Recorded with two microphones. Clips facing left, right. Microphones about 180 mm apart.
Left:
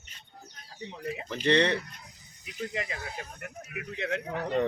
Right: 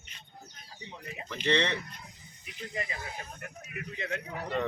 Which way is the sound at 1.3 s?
40° left (ahead or behind).